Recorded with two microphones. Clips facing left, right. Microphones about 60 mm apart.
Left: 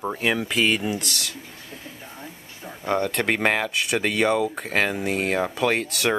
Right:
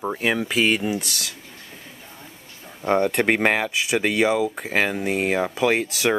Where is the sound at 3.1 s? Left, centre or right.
Centre.